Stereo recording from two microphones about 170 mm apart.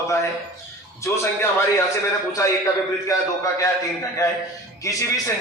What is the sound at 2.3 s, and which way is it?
Speech, 20° left (ahead or behind).